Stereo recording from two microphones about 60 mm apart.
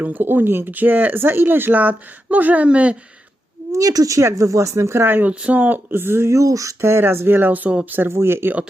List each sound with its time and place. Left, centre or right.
0.0 s speech: right
0.3 s speech: right; by 3.0 s centre
3.7 s a woman's voice: right
5.0 s speech: right
5.3 s speech: right
6.8 s speech: right
8.1 s speech: right